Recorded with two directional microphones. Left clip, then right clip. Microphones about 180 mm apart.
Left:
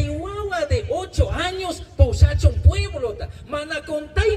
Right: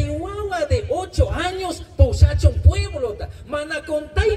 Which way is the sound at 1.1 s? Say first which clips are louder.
Right 1 dB; 20° left (ahead or behind).